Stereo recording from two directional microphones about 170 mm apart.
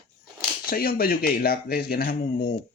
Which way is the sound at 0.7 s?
60° left (ahead or behind).